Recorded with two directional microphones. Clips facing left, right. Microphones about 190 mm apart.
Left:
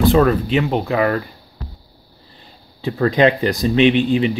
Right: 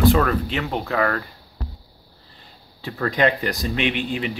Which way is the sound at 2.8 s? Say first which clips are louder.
Left 6 dB; 25° left (ahead or behind).